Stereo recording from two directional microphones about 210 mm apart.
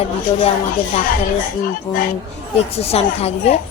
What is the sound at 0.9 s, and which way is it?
Speech, 40° left (ahead or behind).